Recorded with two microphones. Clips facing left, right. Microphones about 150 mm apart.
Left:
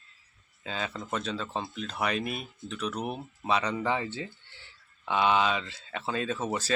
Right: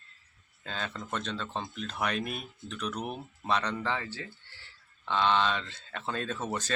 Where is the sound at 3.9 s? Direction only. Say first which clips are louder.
Left 4 dB; 20° left (ahead or behind).